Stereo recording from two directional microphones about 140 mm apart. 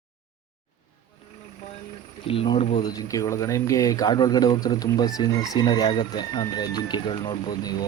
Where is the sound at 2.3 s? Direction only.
40° left (ahead or behind).